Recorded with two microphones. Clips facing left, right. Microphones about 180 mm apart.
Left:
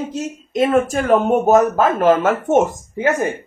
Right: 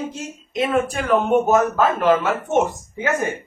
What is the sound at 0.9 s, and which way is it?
Speech, 45° left (ahead or behind).